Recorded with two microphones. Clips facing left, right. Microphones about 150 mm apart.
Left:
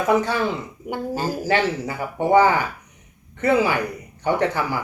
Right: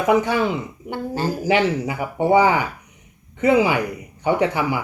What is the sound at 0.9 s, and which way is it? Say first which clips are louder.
Speech: even; 10° left (ahead or behind).